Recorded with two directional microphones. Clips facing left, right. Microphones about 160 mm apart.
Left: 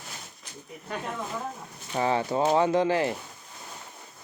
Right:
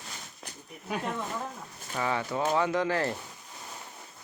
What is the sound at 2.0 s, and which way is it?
Speech, 30° left (ahead or behind).